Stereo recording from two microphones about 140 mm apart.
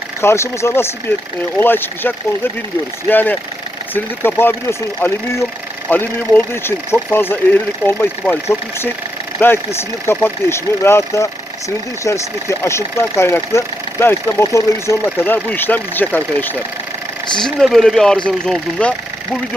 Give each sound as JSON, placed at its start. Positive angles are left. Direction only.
{"t": 0.2, "sound": "speech", "side_deg": 20}
{"t": 10.1, "sound": "speech", "side_deg": 15}
{"t": 17.3, "sound": "speech", "side_deg": 0}